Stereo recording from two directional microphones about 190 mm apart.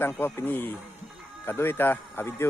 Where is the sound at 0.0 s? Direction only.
10° left (ahead or behind).